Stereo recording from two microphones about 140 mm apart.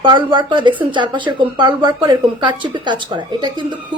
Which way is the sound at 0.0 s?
35° right (ahead or behind).